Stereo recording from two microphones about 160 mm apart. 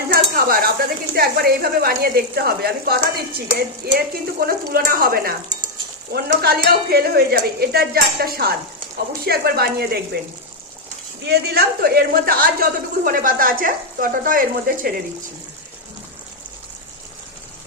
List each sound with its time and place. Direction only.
0.1 s speech: 70° right (ahead or behind)
6.1 s speech: 75° right (ahead or behind)
11.2 s speech: 85° right; by 14.9 s 60° right (ahead or behind)